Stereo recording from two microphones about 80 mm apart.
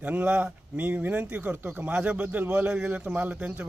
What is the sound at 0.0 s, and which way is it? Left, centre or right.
Speech, centre.